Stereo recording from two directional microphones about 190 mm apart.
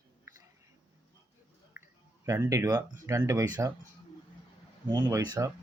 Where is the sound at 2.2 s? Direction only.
15° right (ahead or behind).